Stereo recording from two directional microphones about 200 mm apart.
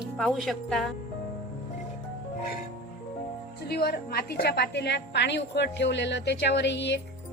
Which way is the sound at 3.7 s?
50° left (ahead or behind).